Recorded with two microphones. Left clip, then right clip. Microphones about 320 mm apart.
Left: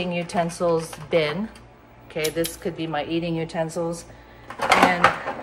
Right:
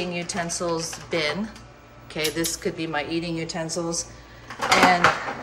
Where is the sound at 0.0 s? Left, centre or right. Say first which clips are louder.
Left 4 dB; centre.